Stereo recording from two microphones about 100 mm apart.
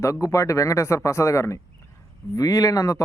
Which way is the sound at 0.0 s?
30° left (ahead or behind).